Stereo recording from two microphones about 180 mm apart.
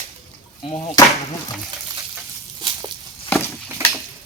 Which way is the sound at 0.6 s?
30° left (ahead or behind).